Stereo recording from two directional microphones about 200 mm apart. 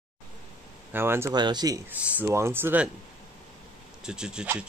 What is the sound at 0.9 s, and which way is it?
Speech, 10° right (ahead or behind).